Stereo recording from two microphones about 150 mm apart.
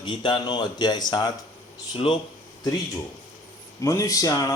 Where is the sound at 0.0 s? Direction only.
30° left (ahead or behind).